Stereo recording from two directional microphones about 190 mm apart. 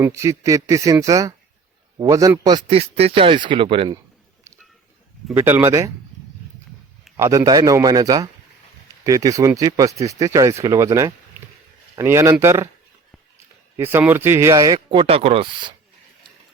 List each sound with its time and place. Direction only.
0.0 s a man's voice: 15° right (ahead or behind)
5.3 s speech: 10° right (ahead or behind)
7.2 s a man's voice: 15° right (ahead or behind)
13.7 s speech: 10° right (ahead or behind); by 15.7 s 30° right (ahead or behind)